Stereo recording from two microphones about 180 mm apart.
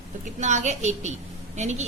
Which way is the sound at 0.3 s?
40° right (ahead or behind).